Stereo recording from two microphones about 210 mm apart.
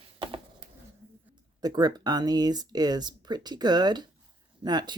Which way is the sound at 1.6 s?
20° right (ahead or behind).